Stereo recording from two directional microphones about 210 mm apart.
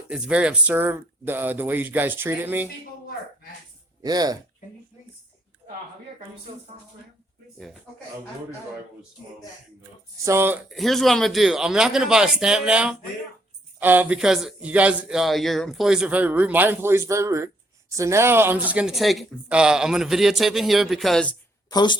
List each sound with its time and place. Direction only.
0.1 s a man's voice: 5° right (ahead or behind)
4.0 s a man's voice: 20° right (ahead or behind)
10.2 s a man's voice: 10° right (ahead or behind)
21.7 s speech: 20° left (ahead or behind)